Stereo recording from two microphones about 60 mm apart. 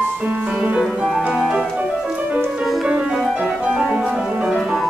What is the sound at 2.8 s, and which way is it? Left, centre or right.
Music, right.